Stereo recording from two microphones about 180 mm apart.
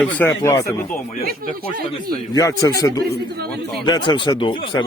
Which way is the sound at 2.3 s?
20° left (ahead or behind).